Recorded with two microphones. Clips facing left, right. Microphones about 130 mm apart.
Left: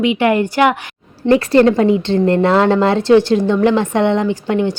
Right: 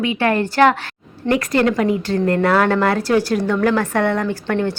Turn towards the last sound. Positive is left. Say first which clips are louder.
# left 4 dB
turn(degrees=15)  # may be behind; listen again after turning